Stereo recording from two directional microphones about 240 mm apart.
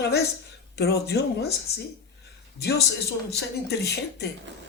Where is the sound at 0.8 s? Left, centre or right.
Left.